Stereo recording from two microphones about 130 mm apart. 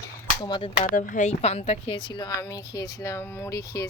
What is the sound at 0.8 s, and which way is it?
Speech, 90° left.